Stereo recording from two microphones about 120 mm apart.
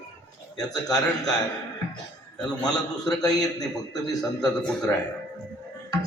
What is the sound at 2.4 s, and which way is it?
A man's voice, 35° left (ahead or behind).